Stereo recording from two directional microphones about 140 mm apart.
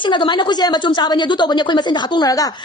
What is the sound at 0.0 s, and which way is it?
A woman's voice, 35° left (ahead or behind).